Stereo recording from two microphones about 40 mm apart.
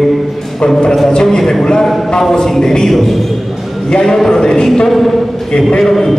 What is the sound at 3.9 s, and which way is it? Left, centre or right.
Speech, centre.